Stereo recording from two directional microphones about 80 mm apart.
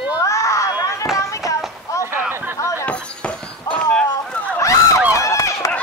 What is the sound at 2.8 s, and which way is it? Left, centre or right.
Chop, centre.